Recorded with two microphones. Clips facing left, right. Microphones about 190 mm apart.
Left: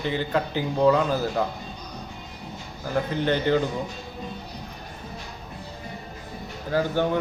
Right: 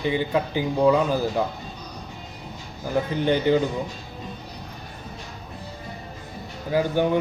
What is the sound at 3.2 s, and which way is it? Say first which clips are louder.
Speech: right 3 dB; 15° right (ahead or behind).